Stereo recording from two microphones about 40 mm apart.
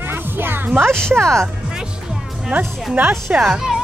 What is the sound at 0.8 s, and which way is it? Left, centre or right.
Speech, centre.